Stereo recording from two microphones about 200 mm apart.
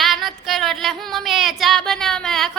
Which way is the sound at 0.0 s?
Centre (ahead or behind).